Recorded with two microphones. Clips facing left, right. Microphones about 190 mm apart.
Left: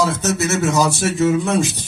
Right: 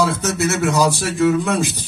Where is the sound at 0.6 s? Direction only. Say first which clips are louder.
Even; 60° right (ahead or behind).